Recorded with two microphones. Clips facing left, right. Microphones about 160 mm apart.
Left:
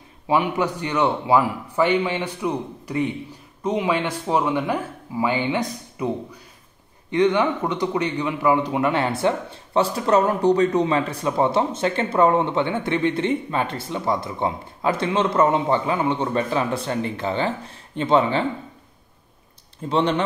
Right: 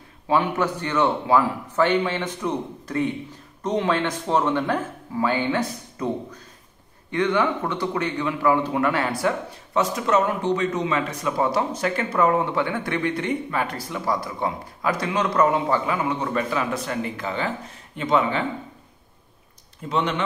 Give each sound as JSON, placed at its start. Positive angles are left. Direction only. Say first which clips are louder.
{"t": 0.3, "sound": "a man's voice", "louder": "left 1 dB", "side_deg": 15}
{"t": 19.9, "sound": "speech", "louder": "left 4 dB", "side_deg": 30}